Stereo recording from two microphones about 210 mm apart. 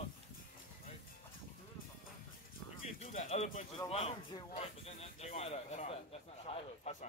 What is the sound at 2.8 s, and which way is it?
Pigeon, 30° left (ahead or behind).